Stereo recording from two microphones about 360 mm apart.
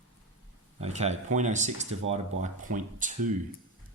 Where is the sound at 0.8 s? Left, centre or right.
Centre.